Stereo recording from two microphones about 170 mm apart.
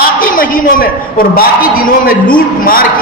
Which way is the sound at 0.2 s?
55° left (ahead or behind).